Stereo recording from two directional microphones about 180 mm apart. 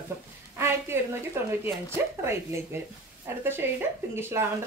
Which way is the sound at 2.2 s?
15° right (ahead or behind).